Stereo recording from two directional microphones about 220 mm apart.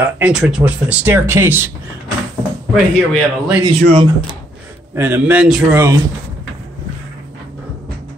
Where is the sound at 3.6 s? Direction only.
20° right (ahead or behind).